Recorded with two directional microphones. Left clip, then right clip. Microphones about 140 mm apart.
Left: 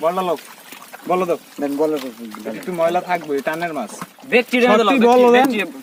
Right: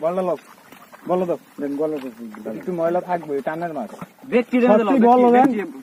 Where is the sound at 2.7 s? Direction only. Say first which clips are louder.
Left 3 dB; 25° right (ahead or behind).